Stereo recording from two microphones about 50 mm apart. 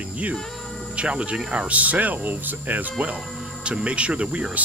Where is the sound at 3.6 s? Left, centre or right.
Right.